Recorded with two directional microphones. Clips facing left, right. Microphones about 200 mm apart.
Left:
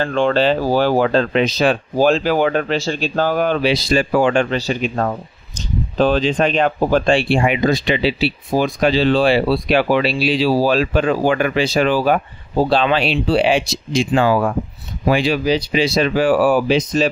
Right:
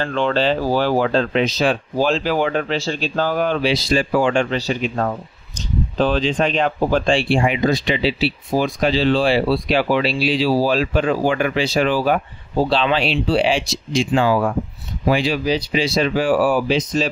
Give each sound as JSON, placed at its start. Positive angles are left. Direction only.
{"t": 0.0, "sound": "speech", "side_deg": 50}